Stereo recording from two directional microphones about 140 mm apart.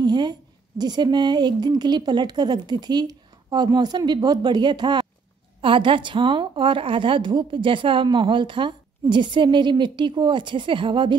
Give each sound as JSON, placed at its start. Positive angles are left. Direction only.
{"t": 0.0, "sound": "a woman's voice", "side_deg": -30}